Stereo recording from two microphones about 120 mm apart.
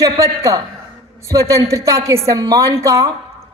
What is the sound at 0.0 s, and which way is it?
A woman's voice, 25° right (ahead or behind).